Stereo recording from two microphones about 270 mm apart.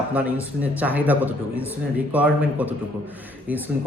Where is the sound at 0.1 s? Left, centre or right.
Centre.